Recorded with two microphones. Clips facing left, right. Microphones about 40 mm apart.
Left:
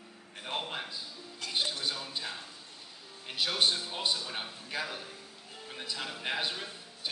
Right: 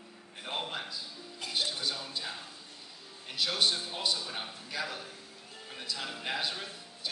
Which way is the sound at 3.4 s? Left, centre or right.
Left.